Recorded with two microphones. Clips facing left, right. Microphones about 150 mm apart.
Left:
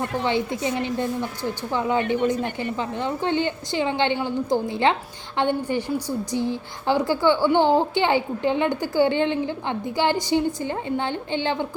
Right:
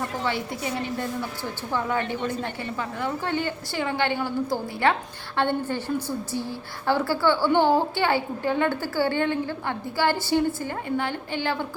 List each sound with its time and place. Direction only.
0.0 s a woman's voice: 20° left (ahead or behind)